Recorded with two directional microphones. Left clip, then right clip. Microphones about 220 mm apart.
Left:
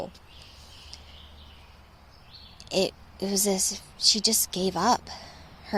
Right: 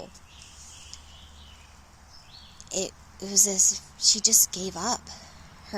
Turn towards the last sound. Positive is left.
turn(degrees=20)  # may be behind; listen again after turning